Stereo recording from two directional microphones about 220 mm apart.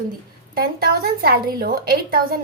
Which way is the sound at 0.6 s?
45° right (ahead or behind).